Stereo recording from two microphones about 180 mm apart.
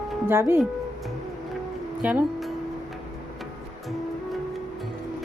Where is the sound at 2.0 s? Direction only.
10° right (ahead or behind).